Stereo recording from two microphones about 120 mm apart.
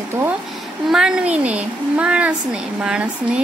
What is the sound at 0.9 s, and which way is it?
Speech, 5° right (ahead or behind).